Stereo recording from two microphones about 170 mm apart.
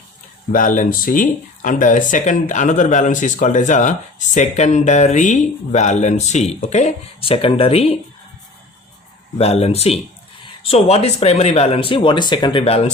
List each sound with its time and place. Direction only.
0.5 s speech: 50° left (ahead or behind); by 7.9 s 35° left (ahead or behind)
9.4 s speech: 35° left (ahead or behind)